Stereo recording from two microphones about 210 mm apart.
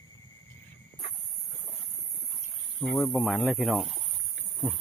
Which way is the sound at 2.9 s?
Centre (ahead or behind).